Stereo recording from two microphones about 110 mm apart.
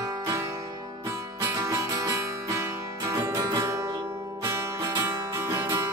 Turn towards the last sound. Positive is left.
turn(degrees=-25)  # may be behind; listen again after turning